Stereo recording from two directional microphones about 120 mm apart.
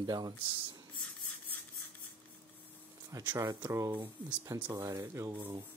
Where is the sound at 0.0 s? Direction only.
35° right (ahead or behind).